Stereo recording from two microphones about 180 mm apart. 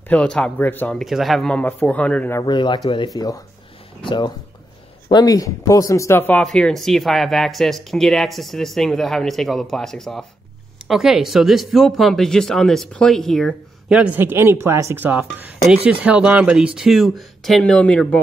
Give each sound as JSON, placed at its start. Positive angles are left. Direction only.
{"t": 0.1, "sound": "speech", "side_deg": 5}
{"t": 2.4, "sound": "speech", "side_deg": 25}